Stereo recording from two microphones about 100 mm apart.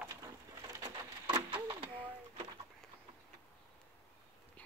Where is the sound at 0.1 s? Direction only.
30° right (ahead or behind).